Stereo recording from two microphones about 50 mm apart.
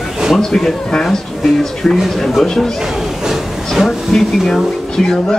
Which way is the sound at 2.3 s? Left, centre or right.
Centre.